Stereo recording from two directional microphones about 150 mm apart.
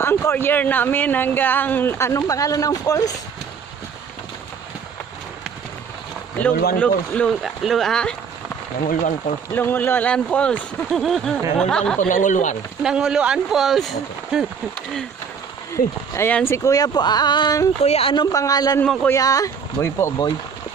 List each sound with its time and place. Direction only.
0.0 s speech: 15° left (ahead or behind)
6.5 s speech: 90° left
6.8 s speech: 5° left (ahead or behind)
9.5 s speech: 15° left (ahead or behind)
12.0 s speech: 60° left (ahead or behind)
12.8 s speech: 5° right (ahead or behind)
15.7 s speech: 20° left (ahead or behind)
17.8 s speech: 40° left (ahead or behind)
18.1 s speech: 25° left (ahead or behind)